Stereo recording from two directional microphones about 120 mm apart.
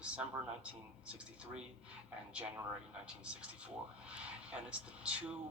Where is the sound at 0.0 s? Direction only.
10° right (ahead or behind).